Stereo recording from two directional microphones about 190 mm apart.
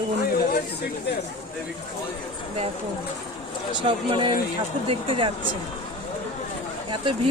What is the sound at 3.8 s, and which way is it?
A woman's voice, 25° right (ahead or behind).